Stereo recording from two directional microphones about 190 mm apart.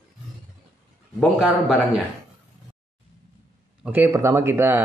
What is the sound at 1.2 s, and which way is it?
Speech, 5° right (ahead or behind).